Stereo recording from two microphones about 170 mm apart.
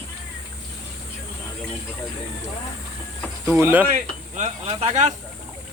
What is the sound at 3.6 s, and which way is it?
Speech, 10° right (ahead or behind).